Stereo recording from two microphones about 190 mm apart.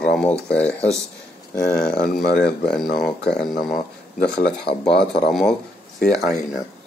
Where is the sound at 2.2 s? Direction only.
60° left (ahead or behind).